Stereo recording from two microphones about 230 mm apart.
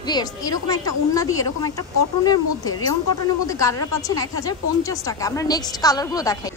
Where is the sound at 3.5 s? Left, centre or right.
Centre.